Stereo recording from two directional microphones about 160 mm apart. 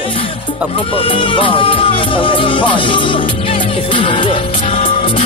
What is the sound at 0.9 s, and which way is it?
Music, 35° left (ahead or behind).